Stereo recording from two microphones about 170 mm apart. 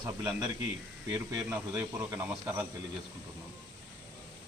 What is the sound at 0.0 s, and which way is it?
A man's voice, 20° right (ahead or behind).